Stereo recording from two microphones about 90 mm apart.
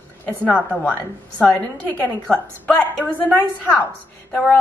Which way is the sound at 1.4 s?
15° left (ahead or behind).